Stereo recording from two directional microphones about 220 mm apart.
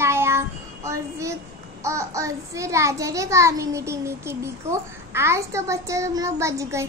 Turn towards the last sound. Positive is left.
turn(degrees=-15)  # may be behind; listen again after turning